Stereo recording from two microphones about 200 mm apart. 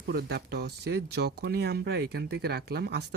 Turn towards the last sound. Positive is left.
turn(degrees=-55)  # may be behind; listen again after turning